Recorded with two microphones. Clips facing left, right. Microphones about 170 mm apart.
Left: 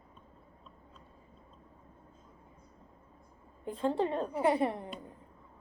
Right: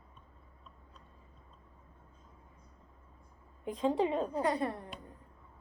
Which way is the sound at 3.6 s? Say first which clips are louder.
Right 1 dB; centre (ahead or behind).